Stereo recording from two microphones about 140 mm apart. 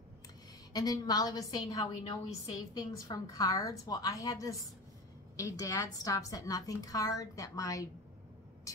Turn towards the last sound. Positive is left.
turn(degrees=25)  # may be behind; listen again after turning